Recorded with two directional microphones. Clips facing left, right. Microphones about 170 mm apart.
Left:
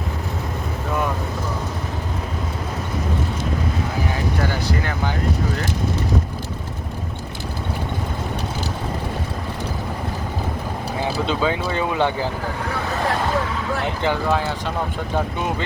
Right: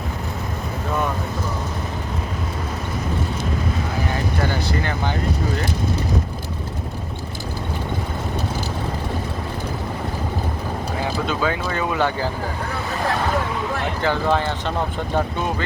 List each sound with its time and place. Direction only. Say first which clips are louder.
11.0 s speech: left 2 dB; 20° left (ahead or behind)
14.3 s speech: right 3 dB; 5° left (ahead or behind)